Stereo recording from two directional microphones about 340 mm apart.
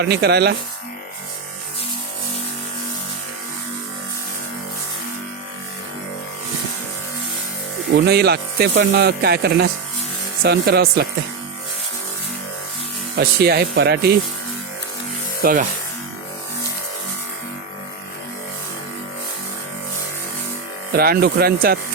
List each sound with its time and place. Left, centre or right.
0.0 s speech: right
8.0 s speech: right
13.1 s speech: right
15.4 s speech: right
20.9 s speech: right